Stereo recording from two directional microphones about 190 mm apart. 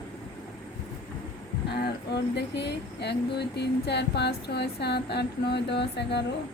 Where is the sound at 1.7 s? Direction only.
60° left (ahead or behind).